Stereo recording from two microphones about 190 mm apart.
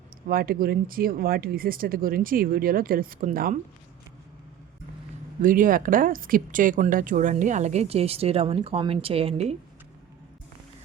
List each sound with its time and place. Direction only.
0.3 s speech: 50° right (ahead or behind)
5.4 s speech: 45° right (ahead or behind)